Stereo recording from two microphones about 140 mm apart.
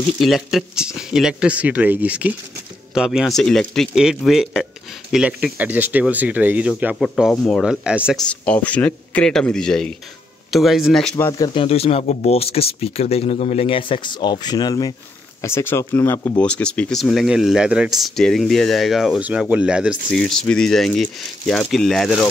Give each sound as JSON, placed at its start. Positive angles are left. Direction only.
{"t": 0.2, "sound": "speech", "side_deg": 0}
{"t": 8.3, "sound": "speech", "side_deg": 10}
{"t": 11.1, "sound": "speech", "side_deg": 20}
{"t": 11.5, "sound": "speech", "side_deg": 45}
{"t": 15.4, "sound": "speech", "side_deg": 20}
{"t": 20.1, "sound": "speech", "side_deg": 5}